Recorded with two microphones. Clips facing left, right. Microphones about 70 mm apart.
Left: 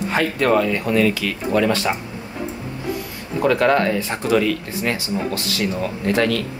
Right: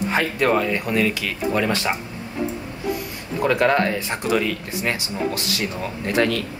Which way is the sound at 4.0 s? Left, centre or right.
Right.